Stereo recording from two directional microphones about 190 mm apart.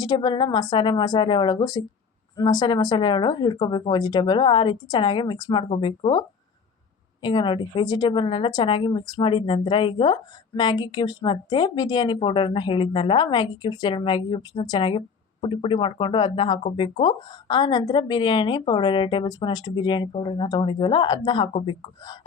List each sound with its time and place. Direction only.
0.0 s a woman's voice: 20° left (ahead or behind)